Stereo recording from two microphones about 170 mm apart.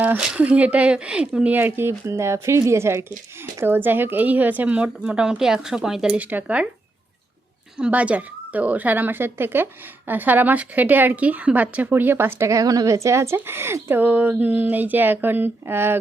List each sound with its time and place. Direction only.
0.0 s speech: 5° right (ahead or behind)
7.8 s speech: 10° right (ahead or behind)